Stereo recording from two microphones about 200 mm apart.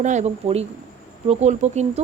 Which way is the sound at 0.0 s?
35° right (ahead or behind).